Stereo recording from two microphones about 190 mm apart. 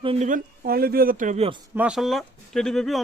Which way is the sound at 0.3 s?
50° right (ahead or behind).